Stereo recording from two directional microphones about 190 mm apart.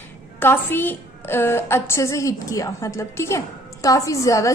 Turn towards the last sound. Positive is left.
turn(degrees=15)  # may be behind; listen again after turning